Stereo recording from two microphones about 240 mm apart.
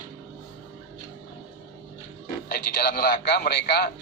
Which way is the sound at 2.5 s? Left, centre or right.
Left.